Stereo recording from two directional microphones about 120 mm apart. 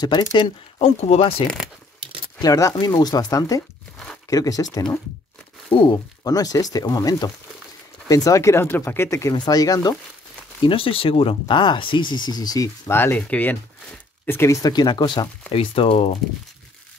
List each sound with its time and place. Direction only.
0.3 s speech: 55° left (ahead or behind)
2.4 s speech: 30° left (ahead or behind)
5.7 s speech: 40° left (ahead or behind); by 9.3 s 25° left (ahead or behind)
9.3 s speech: 35° left (ahead or behind)
10.6 s speech: 45° left (ahead or behind)
12.8 s speech: 20° left (ahead or behind); by 16.2 s 50° left (ahead or behind)